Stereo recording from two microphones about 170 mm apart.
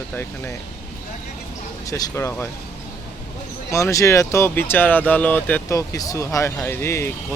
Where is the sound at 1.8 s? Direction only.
20° left (ahead or behind).